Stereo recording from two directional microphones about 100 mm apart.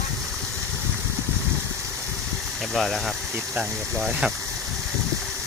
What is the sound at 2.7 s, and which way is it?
Speech, centre (ahead or behind).